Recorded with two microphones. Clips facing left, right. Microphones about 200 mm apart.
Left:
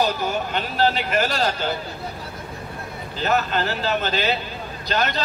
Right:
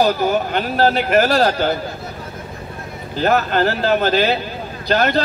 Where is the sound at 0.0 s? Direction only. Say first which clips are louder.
Right 6 dB; 50° right (ahead or behind).